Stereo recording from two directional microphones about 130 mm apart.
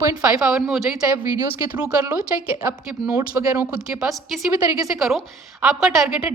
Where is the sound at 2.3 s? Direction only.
15° right (ahead or behind).